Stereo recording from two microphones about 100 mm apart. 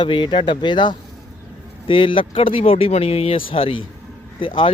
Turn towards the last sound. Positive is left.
turn(degrees=60)  # may be behind; listen again after turning